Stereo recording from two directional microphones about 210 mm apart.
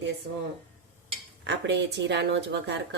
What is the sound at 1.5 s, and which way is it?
Speech, 55° right (ahead or behind).